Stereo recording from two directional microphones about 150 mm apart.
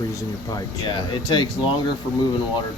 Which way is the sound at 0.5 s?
30° left (ahead or behind).